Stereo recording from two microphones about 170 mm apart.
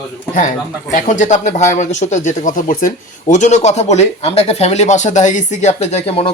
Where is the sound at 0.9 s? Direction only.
45° left (ahead or behind).